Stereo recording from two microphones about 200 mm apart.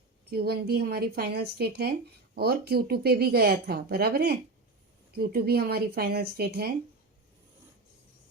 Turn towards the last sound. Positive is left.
turn(degrees=-50)  # may be behind; listen again after turning